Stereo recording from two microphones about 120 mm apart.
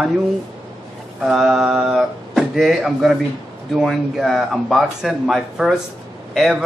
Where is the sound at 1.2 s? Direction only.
5° right (ahead or behind).